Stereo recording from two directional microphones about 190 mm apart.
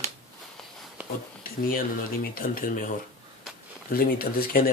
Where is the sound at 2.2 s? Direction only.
50° left (ahead or behind).